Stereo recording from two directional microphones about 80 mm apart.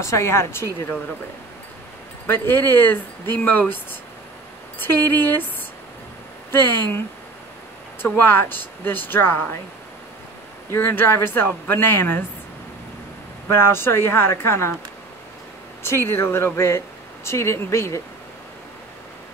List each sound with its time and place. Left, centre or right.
0.0 s speech: left
2.2 s speech: left
4.7 s speech: left
6.5 s speech: left
8.0 s speech: left
10.7 s speech: left
13.5 s speech: left
15.8 s speech: left